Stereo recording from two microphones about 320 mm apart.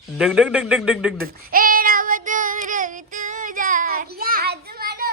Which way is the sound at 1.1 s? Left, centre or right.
Right.